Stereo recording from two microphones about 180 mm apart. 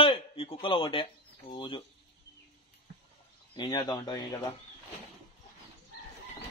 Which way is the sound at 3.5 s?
25° left (ahead or behind).